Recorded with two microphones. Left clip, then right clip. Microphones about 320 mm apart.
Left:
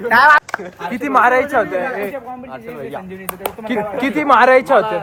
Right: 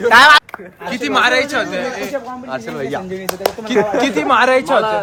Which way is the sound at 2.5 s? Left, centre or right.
Right.